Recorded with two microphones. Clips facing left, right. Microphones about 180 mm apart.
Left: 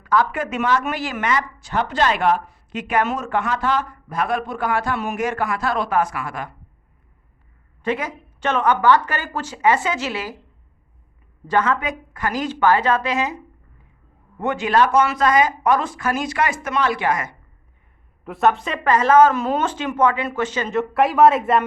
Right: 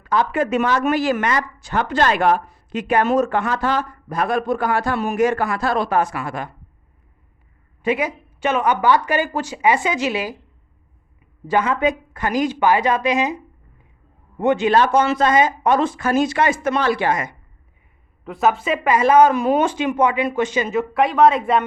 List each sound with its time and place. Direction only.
0.0 s speech: 25° right (ahead or behind)
7.8 s speech: 10° right (ahead or behind)
11.4 s speech: 10° right (ahead or behind)
11.8 s speech: 25° right (ahead or behind)
18.3 s speech: centre (ahead or behind)
20.7 s speech: centre (ahead or behind)